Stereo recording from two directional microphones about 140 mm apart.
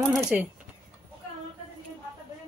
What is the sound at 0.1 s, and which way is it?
Speech, 5° right (ahead or behind).